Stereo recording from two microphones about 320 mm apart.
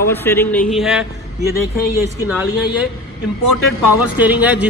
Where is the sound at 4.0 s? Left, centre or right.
Centre.